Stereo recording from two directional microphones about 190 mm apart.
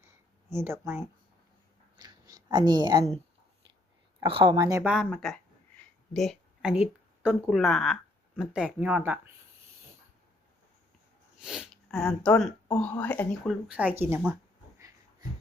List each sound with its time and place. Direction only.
0.5 s speech: 15° right (ahead or behind)
2.0 s a sound: 20° right (ahead or behind)
4.2 s a woman's voice: 25° right (ahead or behind)
4.8 s speech: 5° right (ahead or behind)
11.3 s speech: 5° right (ahead or behind)